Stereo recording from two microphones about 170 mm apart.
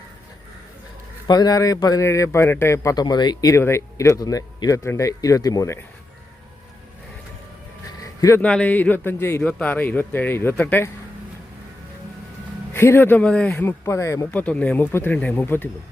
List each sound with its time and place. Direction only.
1.3 s a man's voice: 25° left (ahead or behind)
8.0 s a sound: 20° left (ahead or behind)
8.4 s speech: 10° left (ahead or behind)
12.7 s speech: 15° left (ahead or behind)